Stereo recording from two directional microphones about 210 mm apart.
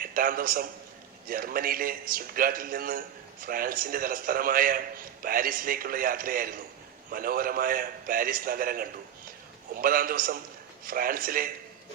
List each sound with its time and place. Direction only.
0.0 s a man's voice: 40° right (ahead or behind)